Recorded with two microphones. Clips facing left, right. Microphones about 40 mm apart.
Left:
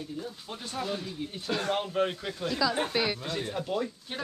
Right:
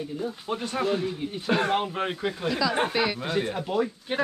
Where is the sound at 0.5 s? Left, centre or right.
Right.